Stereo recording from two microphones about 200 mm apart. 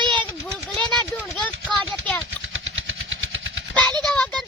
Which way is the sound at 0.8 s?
5° left (ahead or behind).